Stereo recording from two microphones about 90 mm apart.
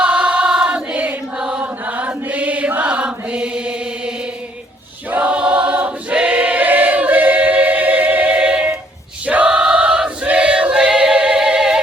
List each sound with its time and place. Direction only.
0.0 s choir: 10° right (ahead or behind)
1.6 s chant: 15° right (ahead or behind)
5.1 s choir: 15° right (ahead or behind)